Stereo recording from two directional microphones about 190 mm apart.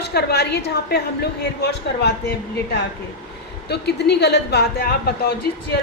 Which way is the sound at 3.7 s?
60° left (ahead or behind).